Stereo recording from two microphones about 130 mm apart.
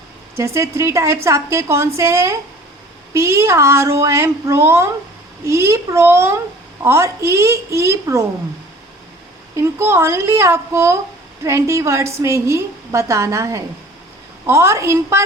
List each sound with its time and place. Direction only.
0.3 s a woman's voice: 20° right (ahead or behind)
9.6 s a woman's voice: 20° right (ahead or behind)